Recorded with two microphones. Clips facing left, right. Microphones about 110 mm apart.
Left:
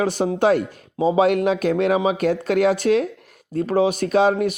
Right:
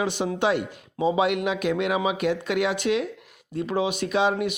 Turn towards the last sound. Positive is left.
turn(degrees=40)  # may be behind; listen again after turning